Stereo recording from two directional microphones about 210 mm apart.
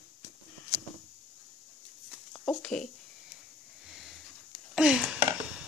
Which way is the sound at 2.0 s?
5° left (ahead or behind).